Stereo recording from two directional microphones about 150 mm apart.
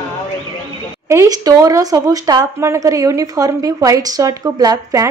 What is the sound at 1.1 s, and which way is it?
Speech, 20° right (ahead or behind).